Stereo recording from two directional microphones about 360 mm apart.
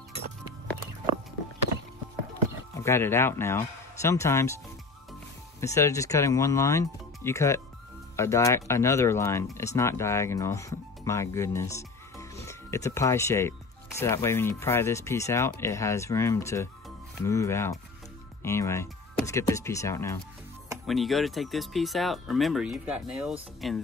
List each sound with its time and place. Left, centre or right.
2.8 s speech: centre
5.6 s speech: centre